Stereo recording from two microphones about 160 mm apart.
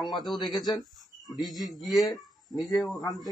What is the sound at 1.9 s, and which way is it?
Speech, 20° left (ahead or behind).